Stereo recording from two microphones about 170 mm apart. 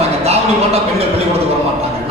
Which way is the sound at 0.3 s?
35° right (ahead or behind).